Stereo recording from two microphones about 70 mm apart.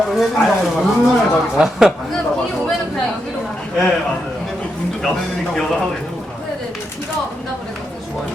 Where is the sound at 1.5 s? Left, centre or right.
Centre.